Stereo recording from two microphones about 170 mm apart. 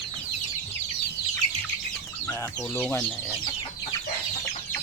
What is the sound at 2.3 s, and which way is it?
Speech, 10° left (ahead or behind).